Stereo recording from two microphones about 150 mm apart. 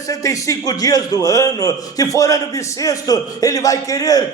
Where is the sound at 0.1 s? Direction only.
20° left (ahead or behind).